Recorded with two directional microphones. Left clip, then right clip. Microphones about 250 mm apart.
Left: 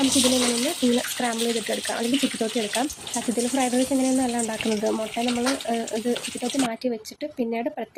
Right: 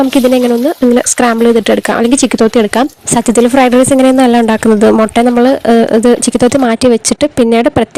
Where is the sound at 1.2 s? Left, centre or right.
Right.